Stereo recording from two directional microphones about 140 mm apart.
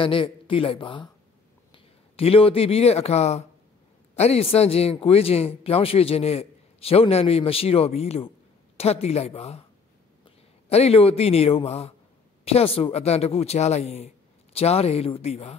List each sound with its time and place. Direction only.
0.0 s a man's voice: 40° left (ahead or behind)